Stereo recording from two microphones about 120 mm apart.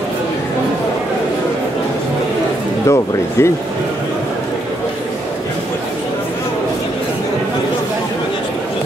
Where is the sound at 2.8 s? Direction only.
25° left (ahead or behind).